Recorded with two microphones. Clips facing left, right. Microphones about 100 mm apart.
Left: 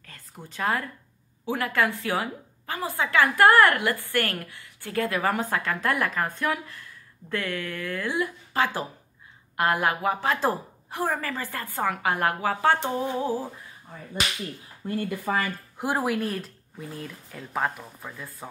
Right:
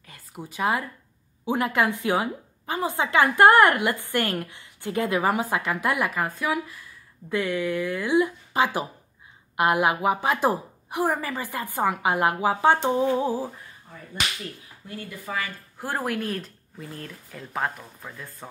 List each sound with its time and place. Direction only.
0.0 s a sound: 10° right (ahead or behind)
1.4 s a woman's voice: 20° right (ahead or behind)
7.2 s a woman's voice: 15° right (ahead or behind)
15.0 s speech: 55° left (ahead or behind)
15.8 s speech: 15° left (ahead or behind)
16.1 s speech: centre (ahead or behind)